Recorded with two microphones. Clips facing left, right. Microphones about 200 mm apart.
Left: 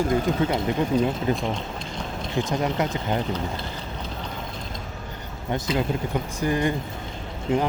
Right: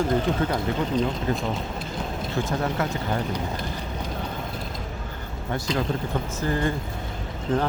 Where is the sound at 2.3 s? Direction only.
15° left (ahead or behind).